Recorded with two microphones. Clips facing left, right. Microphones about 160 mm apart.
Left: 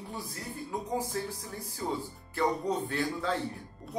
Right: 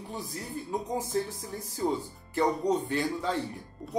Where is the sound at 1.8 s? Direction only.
25° right (ahead or behind).